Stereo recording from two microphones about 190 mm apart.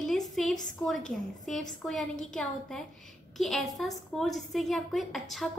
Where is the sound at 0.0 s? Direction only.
Centre (ahead or behind).